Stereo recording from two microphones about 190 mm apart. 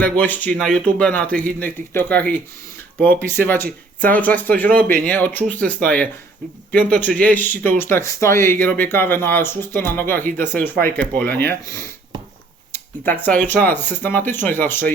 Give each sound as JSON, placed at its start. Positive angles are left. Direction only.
{"t": 0.0, "sound": "speech", "side_deg": 10}
{"t": 12.7, "sound": "speech", "side_deg": 10}